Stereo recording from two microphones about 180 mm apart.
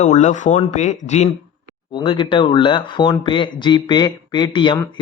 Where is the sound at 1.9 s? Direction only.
30° left (ahead or behind).